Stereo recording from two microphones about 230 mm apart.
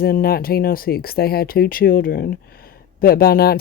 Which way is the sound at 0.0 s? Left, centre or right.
Left.